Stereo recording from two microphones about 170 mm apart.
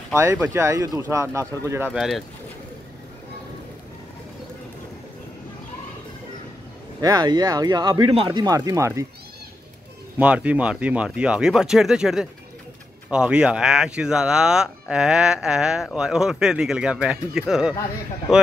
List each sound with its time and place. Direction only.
0.1 s speech: 15° right (ahead or behind)
1.9 s speech: centre (ahead or behind)
7.0 s speech: 25° right (ahead or behind)
10.1 s speech: 10° right (ahead or behind)